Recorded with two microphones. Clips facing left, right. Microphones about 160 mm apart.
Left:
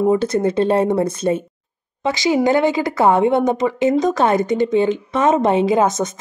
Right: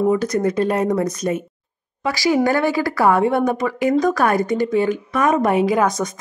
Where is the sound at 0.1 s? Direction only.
30° left (ahead or behind).